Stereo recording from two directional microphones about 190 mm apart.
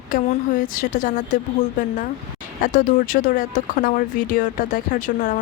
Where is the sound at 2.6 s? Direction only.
45° left (ahead or behind).